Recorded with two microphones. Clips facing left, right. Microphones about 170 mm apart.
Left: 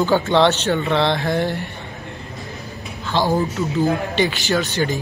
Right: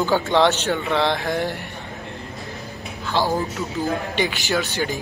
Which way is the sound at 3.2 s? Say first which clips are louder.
Left 3 dB; 15° left (ahead or behind).